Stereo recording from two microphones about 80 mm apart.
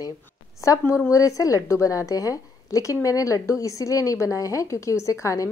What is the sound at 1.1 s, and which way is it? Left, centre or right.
A woman's voice, left.